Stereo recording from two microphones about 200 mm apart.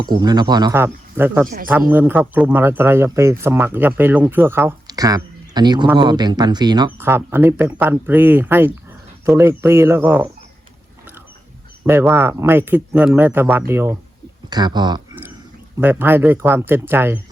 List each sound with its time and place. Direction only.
0.2 s speech: 20° right (ahead or behind)
11.9 s speech: 10° right (ahead or behind)
15.8 s speech: 10° right (ahead or behind)